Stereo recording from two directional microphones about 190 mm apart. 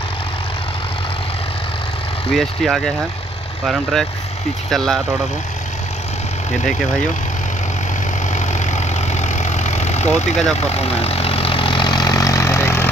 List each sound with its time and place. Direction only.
2.3 s speech: centre (ahead or behind)
8.4 s vehicle: 40° left (ahead or behind); by 12.9 s 15° left (ahead or behind)